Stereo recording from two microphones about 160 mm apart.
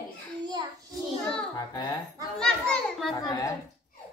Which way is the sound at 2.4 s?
5° left (ahead or behind).